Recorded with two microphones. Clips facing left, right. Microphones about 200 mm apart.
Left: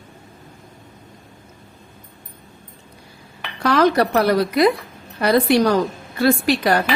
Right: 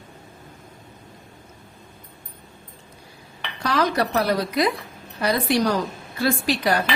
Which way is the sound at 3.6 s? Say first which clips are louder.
Left 6 dB; 60° left (ahead or behind).